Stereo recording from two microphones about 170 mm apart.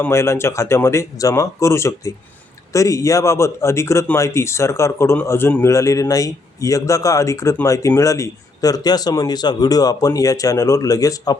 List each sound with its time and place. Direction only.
0.0 s speech: 15° left (ahead or behind)